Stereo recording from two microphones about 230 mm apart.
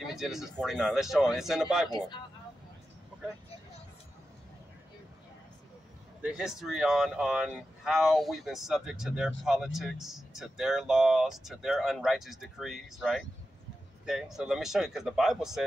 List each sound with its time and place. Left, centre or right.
0.0 s a sound: centre
0.6 s speech: centre
1.9 s speech: centre
6.2 s speech: centre